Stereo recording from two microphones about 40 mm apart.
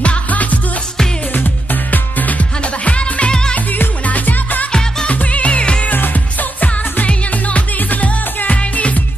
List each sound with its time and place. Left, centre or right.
0.3 s music: left
4.0 s music: left
4.7 s music: centre
5.1 s music: left
5.9 s music: left